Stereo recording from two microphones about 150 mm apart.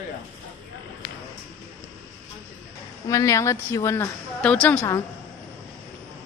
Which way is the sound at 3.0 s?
20° left (ahead or behind).